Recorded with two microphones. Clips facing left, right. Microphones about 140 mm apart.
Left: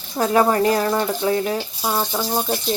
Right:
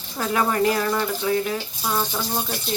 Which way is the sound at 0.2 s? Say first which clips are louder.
Left 5 dB; 35° left (ahead or behind).